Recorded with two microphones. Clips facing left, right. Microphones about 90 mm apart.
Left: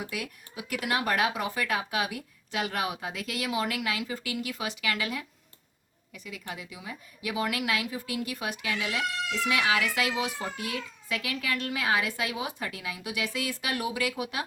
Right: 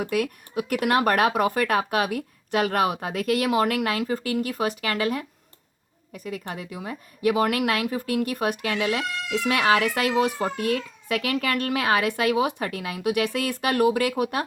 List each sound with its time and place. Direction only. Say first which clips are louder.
0.0 s a woman's voice: right 11 dB; 50° right (ahead or behind)